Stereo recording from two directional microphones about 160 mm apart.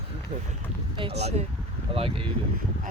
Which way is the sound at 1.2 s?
40° right (ahead or behind).